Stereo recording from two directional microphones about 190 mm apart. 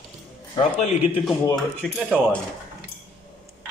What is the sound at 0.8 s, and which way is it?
Speech, 35° left (ahead or behind).